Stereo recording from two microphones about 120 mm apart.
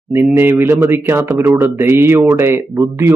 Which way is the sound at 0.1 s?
20° right (ahead or behind).